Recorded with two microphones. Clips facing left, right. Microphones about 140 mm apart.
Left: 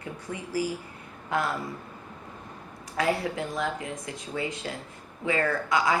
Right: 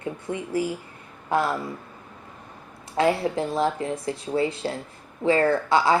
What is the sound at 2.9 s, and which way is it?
A woman's voice, 30° right (ahead or behind).